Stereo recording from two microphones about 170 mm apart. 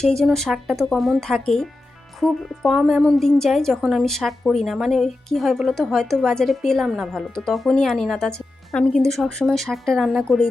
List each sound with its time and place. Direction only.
0.0 s a woman's voice: 5° left (ahead or behind)